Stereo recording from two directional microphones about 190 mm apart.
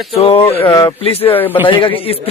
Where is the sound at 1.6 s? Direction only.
25° left (ahead or behind).